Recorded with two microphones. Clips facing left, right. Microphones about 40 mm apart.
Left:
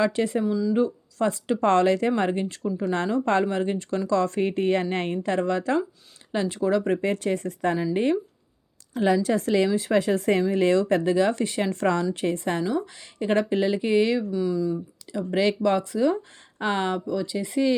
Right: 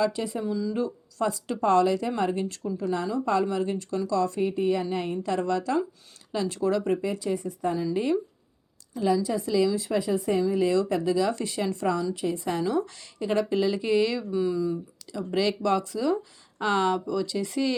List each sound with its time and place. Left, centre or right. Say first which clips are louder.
0.0 s a woman's voice: left 4 dB; left
0.7 s speech: left 6 dB; left
1.6 s a woman's voice: left 2 dB; left
2.9 s a woman's voice: left 3 dB; left
6.9 s speech: left 3 dB; left
8.9 s speech: left 3 dB; left
9.6 s speech: left 4 dB; left
10.8 s a woman's voice: left 3 dB; left
12.6 s speech: even; centre
13.1 s speech: left 2 dB; left
14.3 s speech: left 1 dB; centre
15.1 s speech: left 3 dB; left
16.6 s speech: right 1 dB; left